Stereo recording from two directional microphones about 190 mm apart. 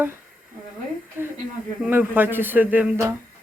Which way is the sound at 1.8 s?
10° right (ahead or behind).